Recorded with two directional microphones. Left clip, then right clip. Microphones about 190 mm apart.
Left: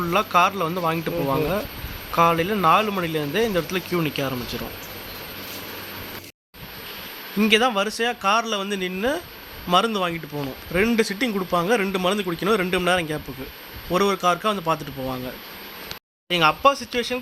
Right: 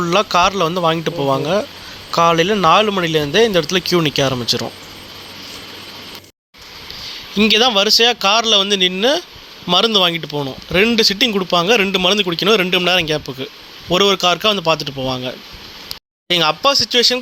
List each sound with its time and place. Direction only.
0.0 s speech: 25° right (ahead or behind)
7.3 s speech: 25° right (ahead or behind)
8.8 s speech: 35° right (ahead or behind)
9.6 s speech: 25° right (ahead or behind)
16.3 s speech: 20° right (ahead or behind)